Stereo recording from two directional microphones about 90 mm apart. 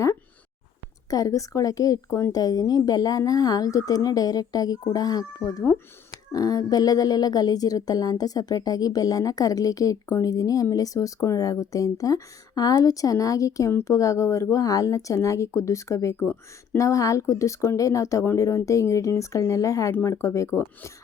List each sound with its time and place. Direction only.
1.1 s a woman's voice: 40° left (ahead or behind)
2.3 s a woman's voice: 45° left (ahead or behind)
19.9 s a woman's voice: 25° left (ahead or behind)